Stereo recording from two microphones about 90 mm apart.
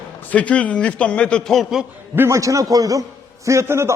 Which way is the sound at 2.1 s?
25° right (ahead or behind).